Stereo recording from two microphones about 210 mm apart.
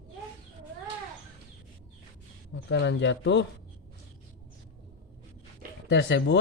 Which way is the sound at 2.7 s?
55° left (ahead or behind).